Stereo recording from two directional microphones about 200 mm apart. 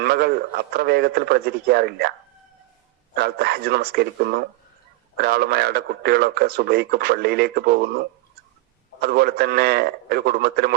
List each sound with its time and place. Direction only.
0.0 s a man's voice: 50° right (ahead or behind)
3.2 s a man's voice: 50° right (ahead or behind)